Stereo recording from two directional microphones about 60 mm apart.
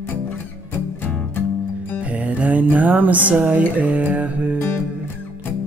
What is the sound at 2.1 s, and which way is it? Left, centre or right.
Music, right.